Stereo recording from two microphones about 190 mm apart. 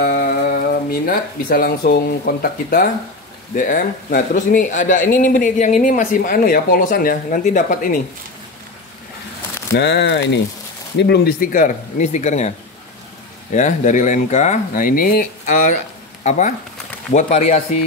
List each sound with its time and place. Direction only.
0.0 s mantra: 50° left (ahead or behind)
1.0 s speech: 50° left (ahead or behind)
9.8 s speech: 65° left (ahead or behind); by 17.7 s 35° left (ahead or behind)